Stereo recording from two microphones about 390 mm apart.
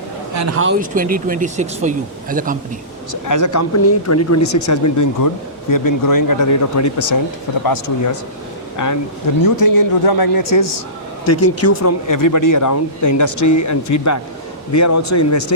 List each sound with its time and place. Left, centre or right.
0.3 s speech: right
3.1 s speech: left
7.6 s speech: left
8.7 s speech: left
11.3 s speech: left